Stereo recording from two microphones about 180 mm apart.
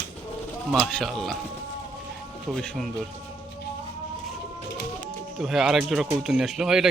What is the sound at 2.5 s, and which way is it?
Speech, 5° left (ahead or behind).